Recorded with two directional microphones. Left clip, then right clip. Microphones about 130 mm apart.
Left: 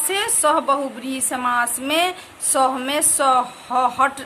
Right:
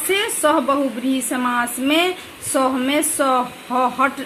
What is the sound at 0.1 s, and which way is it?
A woman's voice, 5° right (ahead or behind).